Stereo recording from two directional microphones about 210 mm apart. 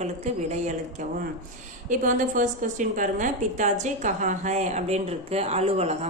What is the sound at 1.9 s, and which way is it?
Speech, 40° right (ahead or behind).